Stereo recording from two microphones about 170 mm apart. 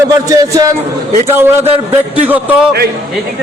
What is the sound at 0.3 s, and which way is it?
Speech, 20° right (ahead or behind).